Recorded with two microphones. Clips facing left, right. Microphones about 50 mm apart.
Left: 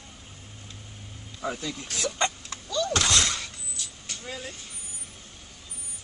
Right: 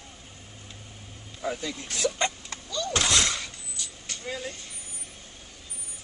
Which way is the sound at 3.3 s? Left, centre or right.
Centre.